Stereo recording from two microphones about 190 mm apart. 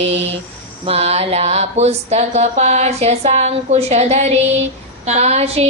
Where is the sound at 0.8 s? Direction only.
35° right (ahead or behind).